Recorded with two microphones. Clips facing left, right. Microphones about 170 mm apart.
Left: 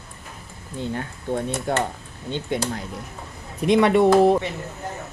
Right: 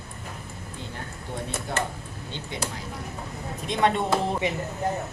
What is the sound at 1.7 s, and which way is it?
Speech, 50° left (ahead or behind).